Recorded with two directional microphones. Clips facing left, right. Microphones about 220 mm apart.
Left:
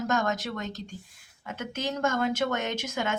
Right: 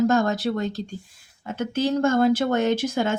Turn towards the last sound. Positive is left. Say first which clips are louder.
# right 9 dB
turn(degrees=-30)  # may be behind; listen again after turning